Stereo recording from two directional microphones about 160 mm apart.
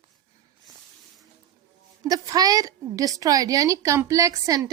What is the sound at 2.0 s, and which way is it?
A woman's voice, 25° right (ahead or behind).